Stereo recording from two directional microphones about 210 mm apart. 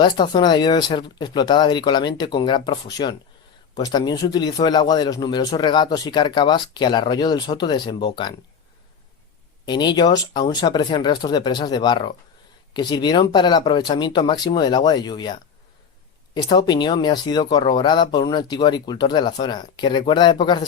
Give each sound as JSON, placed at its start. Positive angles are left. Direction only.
{"t": 0.0, "sound": "speech", "side_deg": 20}
{"t": 9.6, "sound": "speech", "side_deg": 20}